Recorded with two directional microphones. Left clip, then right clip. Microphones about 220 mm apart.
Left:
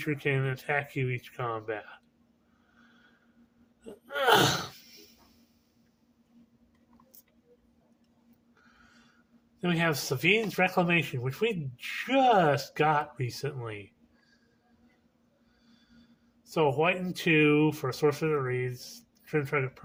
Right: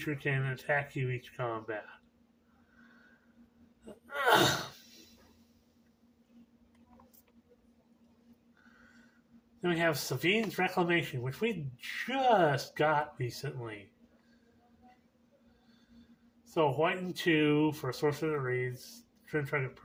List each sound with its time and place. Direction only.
0.0 s speech: 40° left (ahead or behind)
3.8 s speech: 45° left (ahead or behind)
9.6 s speech: 45° left (ahead or behind)
16.6 s speech: 45° left (ahead or behind)